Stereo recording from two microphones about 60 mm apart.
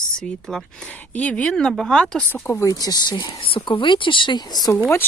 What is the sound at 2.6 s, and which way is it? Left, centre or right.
Speech, left.